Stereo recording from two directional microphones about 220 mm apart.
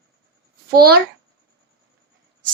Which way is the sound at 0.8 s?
45° right (ahead or behind).